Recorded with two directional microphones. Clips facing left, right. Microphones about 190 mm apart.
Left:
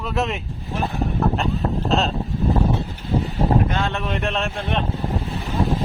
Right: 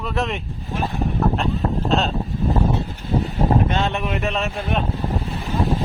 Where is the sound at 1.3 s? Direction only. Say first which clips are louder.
Right 1 dB; centre (ahead or behind).